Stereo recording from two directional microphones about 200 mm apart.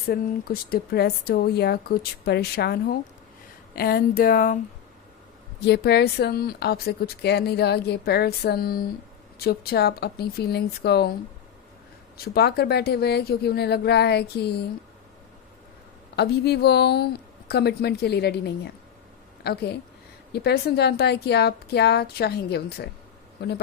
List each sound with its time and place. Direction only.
0.1 s speech: 50° left (ahead or behind)
5.6 s speech: 55° left (ahead or behind)
12.1 s speech: 50° left (ahead or behind)
16.1 s a woman's voice: 55° left (ahead or behind)